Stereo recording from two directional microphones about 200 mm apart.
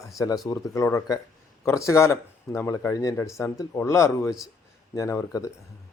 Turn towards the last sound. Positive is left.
turn(degrees=15)  # may be behind; listen again after turning